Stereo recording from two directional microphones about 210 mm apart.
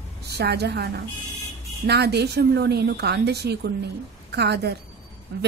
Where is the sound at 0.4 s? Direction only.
50° right (ahead or behind).